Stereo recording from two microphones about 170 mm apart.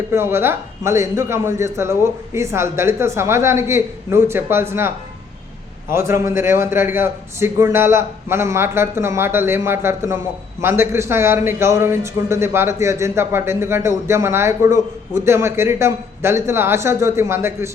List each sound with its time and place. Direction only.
0.1 s speech: 15° right (ahead or behind)
5.9 s speech: 15° right (ahead or behind)